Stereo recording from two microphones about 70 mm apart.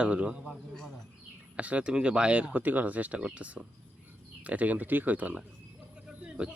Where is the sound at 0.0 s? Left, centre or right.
Centre.